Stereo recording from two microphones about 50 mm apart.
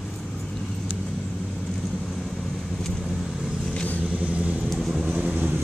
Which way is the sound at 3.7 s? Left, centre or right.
Left.